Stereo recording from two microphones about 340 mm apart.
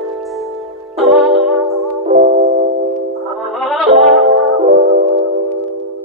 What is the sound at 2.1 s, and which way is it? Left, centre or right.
Music, centre.